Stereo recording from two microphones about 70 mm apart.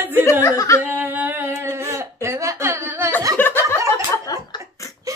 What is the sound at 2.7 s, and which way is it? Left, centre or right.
Speech, right.